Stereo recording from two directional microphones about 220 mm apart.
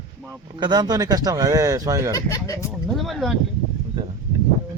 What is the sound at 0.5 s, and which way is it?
Speech, 20° right (ahead or behind).